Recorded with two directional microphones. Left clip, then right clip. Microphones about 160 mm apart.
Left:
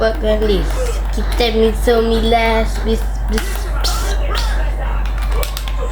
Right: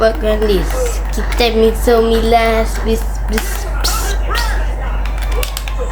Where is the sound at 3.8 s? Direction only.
30° right (ahead or behind).